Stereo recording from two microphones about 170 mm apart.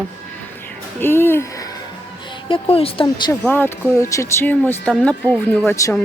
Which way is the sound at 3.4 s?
10° left (ahead or behind).